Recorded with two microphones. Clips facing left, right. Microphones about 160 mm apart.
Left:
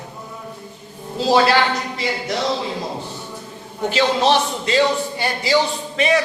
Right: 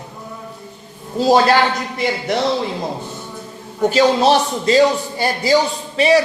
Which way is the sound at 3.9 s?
40° right (ahead or behind).